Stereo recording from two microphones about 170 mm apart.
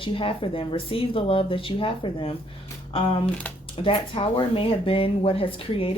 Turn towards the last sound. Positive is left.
turn(degrees=35)  # may be behind; listen again after turning